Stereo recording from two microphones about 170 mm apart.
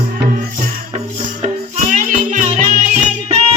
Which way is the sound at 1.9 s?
45° right (ahead or behind).